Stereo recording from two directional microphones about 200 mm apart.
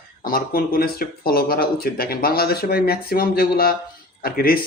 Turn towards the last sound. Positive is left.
turn(degrees=50)  # may be behind; listen again after turning